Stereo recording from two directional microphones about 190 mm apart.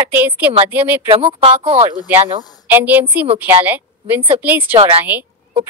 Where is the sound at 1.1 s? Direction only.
30° right (ahead or behind).